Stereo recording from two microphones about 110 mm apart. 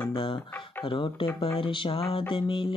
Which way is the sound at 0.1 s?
55° left (ahead or behind).